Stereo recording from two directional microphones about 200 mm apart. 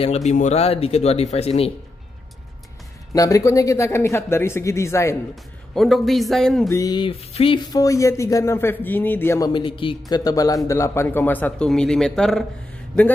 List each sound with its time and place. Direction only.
0.0 s speech: 35° left (ahead or behind)
3.1 s speech: 15° left (ahead or behind)
5.3 s speech: centre (ahead or behind)
6.7 s speech: 20° left (ahead or behind); by 12.4 s centre (ahead or behind)